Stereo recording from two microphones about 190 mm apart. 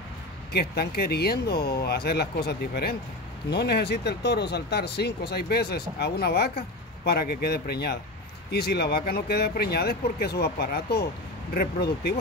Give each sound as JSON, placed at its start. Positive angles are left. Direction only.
{"t": 0.5, "sound": "speech", "side_deg": 55}